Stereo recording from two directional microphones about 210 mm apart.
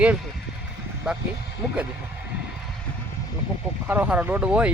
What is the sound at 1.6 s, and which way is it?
Speech, 5° right (ahead or behind).